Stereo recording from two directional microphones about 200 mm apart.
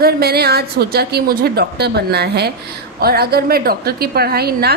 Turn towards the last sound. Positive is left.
turn(degrees=-50)  # may be behind; listen again after turning